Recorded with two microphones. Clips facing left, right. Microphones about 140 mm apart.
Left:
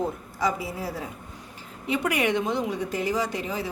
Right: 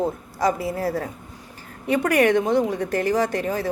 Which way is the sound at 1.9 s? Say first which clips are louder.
Right 6 dB; 45° right (ahead or behind).